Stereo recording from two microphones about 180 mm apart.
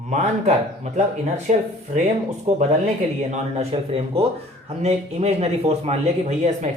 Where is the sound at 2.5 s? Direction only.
40° right (ahead or behind).